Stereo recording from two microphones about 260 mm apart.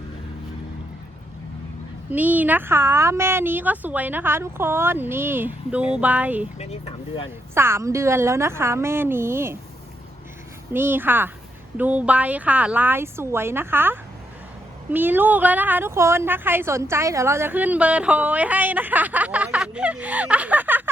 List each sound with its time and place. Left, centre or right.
2.0 s a woman's voice: centre
6.6 s speech: left
7.5 s a woman's voice: centre
10.7 s a woman's voice: centre